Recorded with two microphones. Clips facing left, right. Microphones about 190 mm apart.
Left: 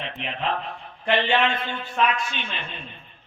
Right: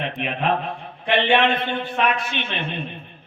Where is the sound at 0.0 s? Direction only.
55° right (ahead or behind).